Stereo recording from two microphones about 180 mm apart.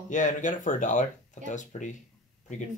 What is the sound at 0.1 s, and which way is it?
Speech, 45° left (ahead or behind).